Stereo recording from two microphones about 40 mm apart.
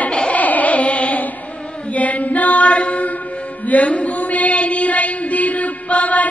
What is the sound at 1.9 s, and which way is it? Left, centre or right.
Mantra, left.